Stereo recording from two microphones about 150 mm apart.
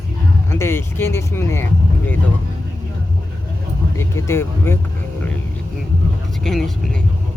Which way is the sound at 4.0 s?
20° left (ahead or behind).